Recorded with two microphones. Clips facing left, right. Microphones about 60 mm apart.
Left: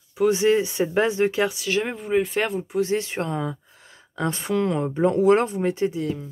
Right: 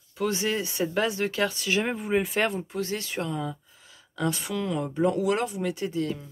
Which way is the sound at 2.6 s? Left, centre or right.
Centre.